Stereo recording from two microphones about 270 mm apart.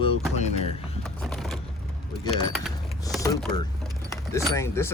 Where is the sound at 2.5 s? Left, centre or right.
Centre.